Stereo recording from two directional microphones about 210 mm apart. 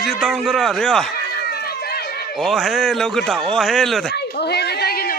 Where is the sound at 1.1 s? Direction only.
45° left (ahead or behind).